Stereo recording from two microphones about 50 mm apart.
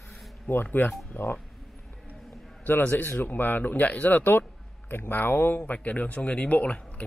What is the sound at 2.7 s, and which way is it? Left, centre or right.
A man's voice, left.